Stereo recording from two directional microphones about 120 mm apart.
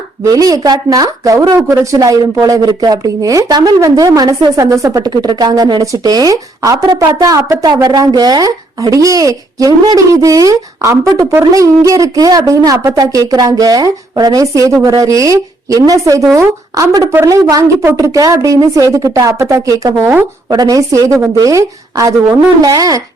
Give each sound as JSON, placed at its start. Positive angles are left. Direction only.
{"t": 0.3, "sound": "a woman's voice", "side_deg": -30}